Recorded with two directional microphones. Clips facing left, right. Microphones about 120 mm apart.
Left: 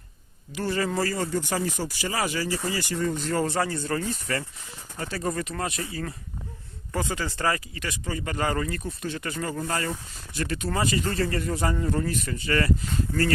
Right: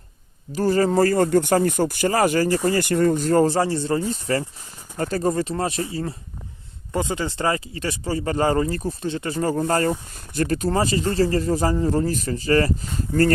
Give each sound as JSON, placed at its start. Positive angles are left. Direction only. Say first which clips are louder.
{"t": 0.5, "sound": "speech", "louder": "right 8 dB", "side_deg": -40}